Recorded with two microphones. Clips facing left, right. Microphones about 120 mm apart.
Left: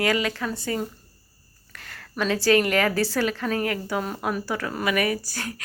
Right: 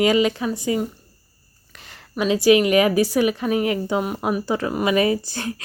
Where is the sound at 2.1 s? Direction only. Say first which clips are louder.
Right 5 dB; 15° right (ahead or behind).